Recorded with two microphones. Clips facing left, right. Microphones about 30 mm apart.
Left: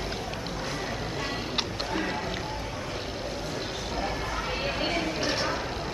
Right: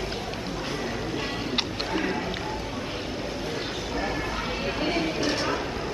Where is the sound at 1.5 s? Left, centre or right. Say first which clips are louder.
Right 3 dB; centre.